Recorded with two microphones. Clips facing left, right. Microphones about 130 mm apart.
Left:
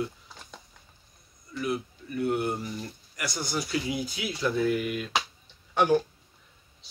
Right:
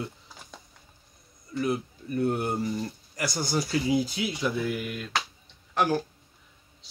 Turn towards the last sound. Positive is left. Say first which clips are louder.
# left 3 dB
turn(degrees=0)  # may be behind; listen again after turning